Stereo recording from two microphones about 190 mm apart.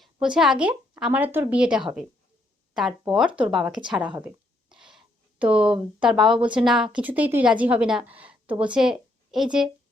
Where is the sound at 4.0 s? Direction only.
25° right (ahead or behind).